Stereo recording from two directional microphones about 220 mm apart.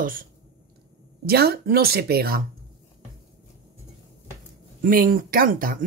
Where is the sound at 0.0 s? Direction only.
40° right (ahead or behind).